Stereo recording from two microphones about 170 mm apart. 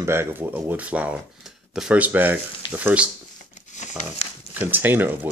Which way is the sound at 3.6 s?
45° left (ahead or behind).